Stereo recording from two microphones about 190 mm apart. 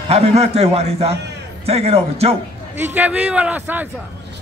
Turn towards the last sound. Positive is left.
turn(degrees=-10)  # may be behind; listen again after turning